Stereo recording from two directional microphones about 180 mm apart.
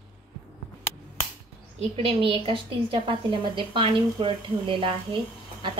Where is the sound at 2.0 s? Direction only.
30° right (ahead or behind).